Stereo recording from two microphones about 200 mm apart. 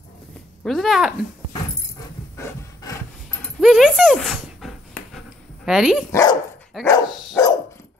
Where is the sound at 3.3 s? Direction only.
5° left (ahead or behind).